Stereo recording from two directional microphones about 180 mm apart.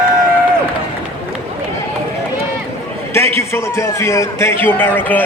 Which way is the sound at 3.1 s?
15° left (ahead or behind).